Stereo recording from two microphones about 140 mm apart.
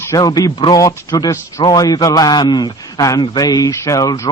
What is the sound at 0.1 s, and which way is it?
A man's voice, 25° left (ahead or behind).